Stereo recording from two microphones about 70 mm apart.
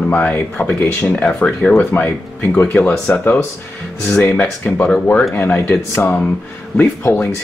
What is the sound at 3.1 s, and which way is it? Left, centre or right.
Speech, left.